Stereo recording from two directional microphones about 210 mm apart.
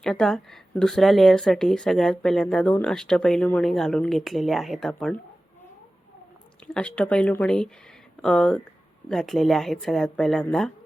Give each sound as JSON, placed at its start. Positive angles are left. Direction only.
{"t": 0.0, "sound": "speech", "side_deg": 0}
{"t": 6.7, "sound": "speech", "side_deg": 5}